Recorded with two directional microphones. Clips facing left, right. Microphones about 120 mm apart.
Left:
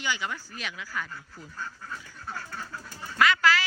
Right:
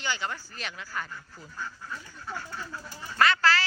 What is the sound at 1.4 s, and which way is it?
Speech, centre (ahead or behind).